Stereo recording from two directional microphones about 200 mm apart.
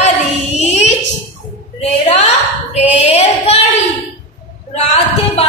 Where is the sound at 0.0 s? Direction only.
35° left (ahead or behind).